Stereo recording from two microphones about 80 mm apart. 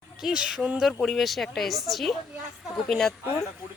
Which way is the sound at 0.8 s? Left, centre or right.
Centre.